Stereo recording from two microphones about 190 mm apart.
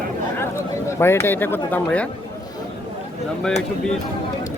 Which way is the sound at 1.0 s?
15° left (ahead or behind).